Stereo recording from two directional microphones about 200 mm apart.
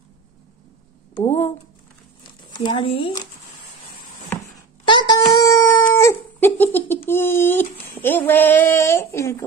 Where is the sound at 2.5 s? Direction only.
25° left (ahead or behind).